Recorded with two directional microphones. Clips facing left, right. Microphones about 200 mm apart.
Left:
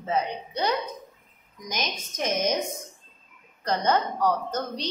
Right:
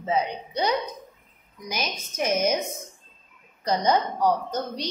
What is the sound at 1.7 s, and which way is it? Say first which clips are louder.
Speech: right 1 dB; 10° right (ahead or behind).